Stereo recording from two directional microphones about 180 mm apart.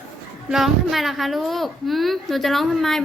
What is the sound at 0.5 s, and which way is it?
A child's voice, centre (ahead or behind).